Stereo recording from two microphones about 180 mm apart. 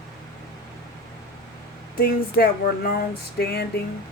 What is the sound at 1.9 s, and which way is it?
Speech, 60° left (ahead or behind).